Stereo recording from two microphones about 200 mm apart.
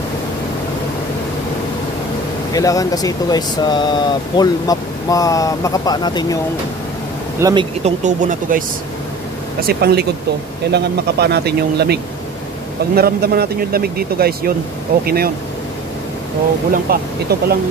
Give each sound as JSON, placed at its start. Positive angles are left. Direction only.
{"t": 2.5, "sound": "speech", "side_deg": 15}
{"t": 7.3, "sound": "speech", "side_deg": -15}
{"t": 7.8, "sound": "speech", "side_deg": -40}
{"t": 9.7, "sound": "speech", "side_deg": -55}
{"t": 16.7, "sound": "speech", "side_deg": -50}